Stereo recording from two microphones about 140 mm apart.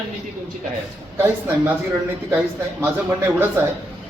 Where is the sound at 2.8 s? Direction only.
15° right (ahead or behind).